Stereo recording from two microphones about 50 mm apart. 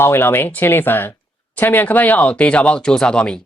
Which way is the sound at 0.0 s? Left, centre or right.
Left.